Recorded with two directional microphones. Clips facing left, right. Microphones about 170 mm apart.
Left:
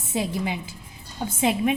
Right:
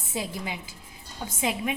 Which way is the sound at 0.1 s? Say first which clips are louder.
Left 6 dB; 20° left (ahead or behind).